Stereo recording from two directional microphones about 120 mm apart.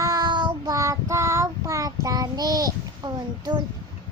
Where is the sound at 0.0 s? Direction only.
30° right (ahead or behind).